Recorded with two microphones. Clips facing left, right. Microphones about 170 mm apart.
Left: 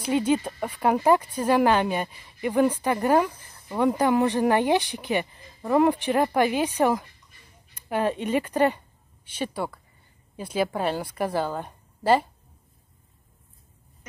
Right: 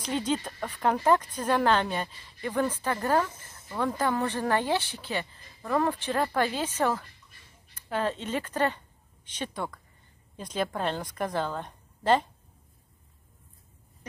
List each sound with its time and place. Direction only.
0.0 s a woman's voice: 10° left (ahead or behind)